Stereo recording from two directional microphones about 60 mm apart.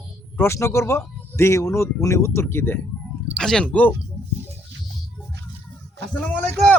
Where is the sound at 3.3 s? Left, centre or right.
Centre.